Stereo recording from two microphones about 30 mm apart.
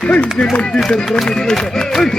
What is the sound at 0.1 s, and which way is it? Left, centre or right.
Speech, left.